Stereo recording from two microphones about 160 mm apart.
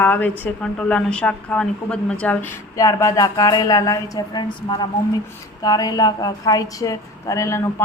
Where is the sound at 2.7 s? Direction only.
20° left (ahead or behind).